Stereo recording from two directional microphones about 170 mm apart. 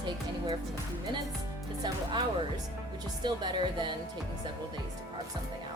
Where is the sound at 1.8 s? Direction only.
25° right (ahead or behind).